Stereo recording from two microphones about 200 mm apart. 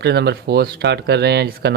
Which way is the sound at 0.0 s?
55° right (ahead or behind).